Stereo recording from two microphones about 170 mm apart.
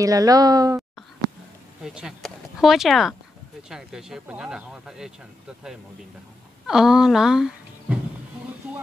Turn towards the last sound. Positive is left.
turn(degrees=-5)  # may be behind; listen again after turning